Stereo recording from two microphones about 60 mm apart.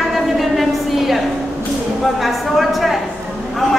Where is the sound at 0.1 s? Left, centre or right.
Centre.